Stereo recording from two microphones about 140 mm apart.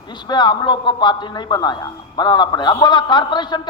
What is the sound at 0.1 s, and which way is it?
A man's voice, 30° left (ahead or behind).